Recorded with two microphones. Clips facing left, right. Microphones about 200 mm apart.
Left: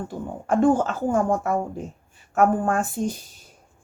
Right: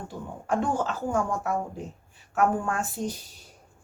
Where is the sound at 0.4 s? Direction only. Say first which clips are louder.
Left 8 dB; 50° left (ahead or behind).